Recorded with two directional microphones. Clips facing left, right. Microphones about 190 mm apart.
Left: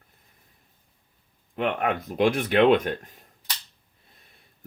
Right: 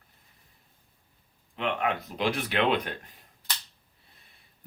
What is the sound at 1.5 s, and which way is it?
Speech, 50° left (ahead or behind).